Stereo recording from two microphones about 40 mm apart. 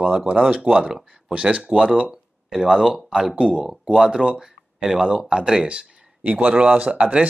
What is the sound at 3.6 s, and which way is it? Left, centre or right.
Speech, centre.